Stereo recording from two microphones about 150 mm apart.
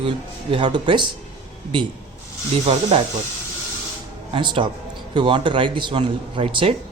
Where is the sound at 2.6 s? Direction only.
40° right (ahead or behind).